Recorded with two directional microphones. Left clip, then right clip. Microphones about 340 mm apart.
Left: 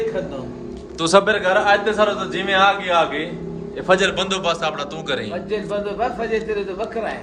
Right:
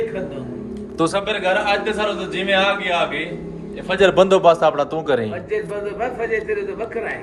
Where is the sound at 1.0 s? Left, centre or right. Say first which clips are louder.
Right 3 dB; centre.